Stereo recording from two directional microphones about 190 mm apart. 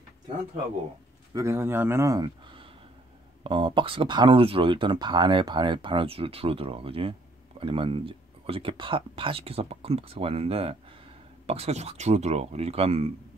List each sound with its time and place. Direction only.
1.3 s speech: 15° right (ahead or behind); by 13.1 s 30° right (ahead or behind)